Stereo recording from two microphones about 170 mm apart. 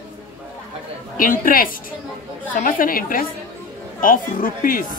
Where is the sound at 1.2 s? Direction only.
55° left (ahead or behind).